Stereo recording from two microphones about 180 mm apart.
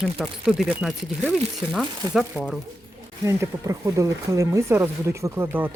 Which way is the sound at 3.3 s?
15° right (ahead or behind).